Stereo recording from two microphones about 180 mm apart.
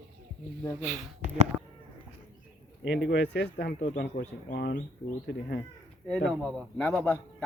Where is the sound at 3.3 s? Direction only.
65° left (ahead or behind).